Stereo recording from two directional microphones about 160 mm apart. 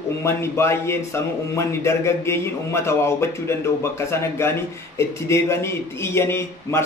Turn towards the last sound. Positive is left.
turn(degrees=15)  # may be behind; listen again after turning